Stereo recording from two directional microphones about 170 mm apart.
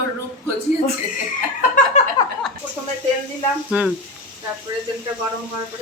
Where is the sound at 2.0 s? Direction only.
45° left (ahead or behind).